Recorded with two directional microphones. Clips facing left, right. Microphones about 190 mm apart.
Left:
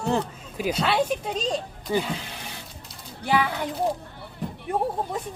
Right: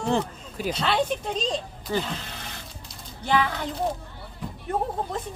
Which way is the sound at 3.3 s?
10° left (ahead or behind).